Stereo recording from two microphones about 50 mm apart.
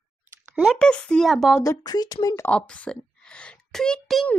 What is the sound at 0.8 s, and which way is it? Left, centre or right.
Speech, centre.